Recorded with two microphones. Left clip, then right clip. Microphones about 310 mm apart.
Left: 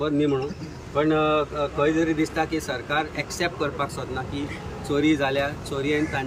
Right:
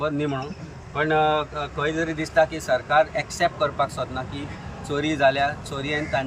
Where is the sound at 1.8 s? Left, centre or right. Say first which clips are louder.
Left 3 dB; centre.